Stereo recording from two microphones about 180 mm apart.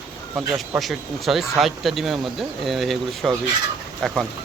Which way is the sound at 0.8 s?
Centre (ahead or behind).